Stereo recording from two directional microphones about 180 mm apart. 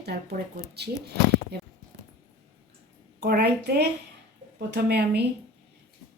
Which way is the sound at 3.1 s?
65° right (ahead or behind).